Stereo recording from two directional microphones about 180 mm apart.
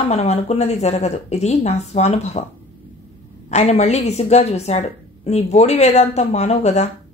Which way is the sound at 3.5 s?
40° left (ahead or behind).